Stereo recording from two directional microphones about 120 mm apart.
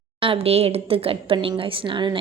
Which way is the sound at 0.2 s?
50° right (ahead or behind).